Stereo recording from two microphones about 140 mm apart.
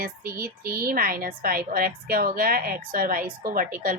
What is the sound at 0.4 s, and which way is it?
A woman's voice, 90° right.